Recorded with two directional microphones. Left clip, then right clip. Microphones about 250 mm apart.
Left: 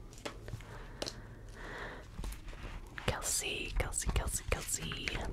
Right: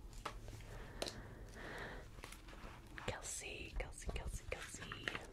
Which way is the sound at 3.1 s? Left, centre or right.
Centre.